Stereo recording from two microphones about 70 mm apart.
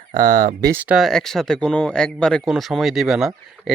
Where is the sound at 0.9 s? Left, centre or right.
Centre.